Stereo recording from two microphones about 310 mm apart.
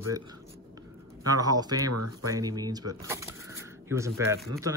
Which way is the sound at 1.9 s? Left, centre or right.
Right.